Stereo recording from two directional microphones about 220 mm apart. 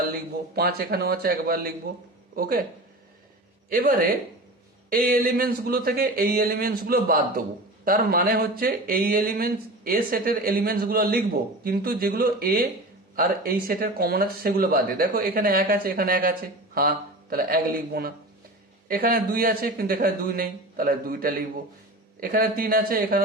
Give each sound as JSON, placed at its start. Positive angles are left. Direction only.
{"t": 0.1, "sound": "a man's voice", "side_deg": -45}
{"t": 3.7, "sound": "a man's voice", "side_deg": -40}